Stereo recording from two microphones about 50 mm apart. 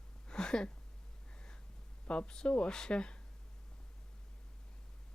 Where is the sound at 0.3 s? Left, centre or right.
Centre.